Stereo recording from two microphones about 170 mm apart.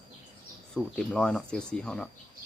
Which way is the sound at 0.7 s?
5° left (ahead or behind).